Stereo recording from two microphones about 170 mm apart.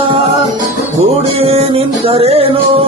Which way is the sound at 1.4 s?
35° right (ahead or behind).